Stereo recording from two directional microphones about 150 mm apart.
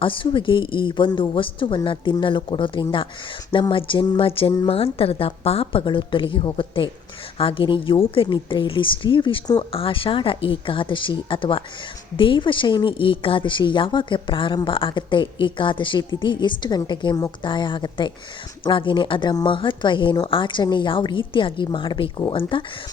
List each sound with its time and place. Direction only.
0.0 s a woman's voice: 35° left (ahead or behind)